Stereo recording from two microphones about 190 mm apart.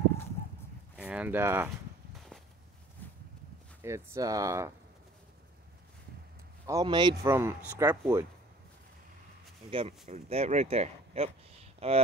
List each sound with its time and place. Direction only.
0.9 s speech: 5° right (ahead or behind)
3.8 s speech: 15° right (ahead or behind)
6.6 s speech: 20° right (ahead or behind)
7.2 s speech: 15° right (ahead or behind)
9.7 s speech: 30° right (ahead or behind)